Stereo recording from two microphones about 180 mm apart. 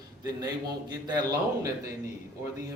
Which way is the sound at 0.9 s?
20° right (ahead or behind).